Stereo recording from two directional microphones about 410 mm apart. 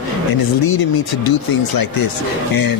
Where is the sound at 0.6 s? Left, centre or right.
Left.